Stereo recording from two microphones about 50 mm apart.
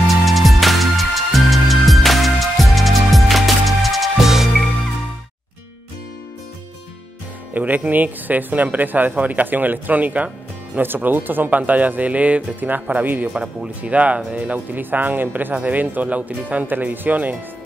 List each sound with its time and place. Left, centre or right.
0.2 s music: centre
7.5 s speech: right
10.8 s speech: right
13.3 s speech: centre
13.8 s speech: right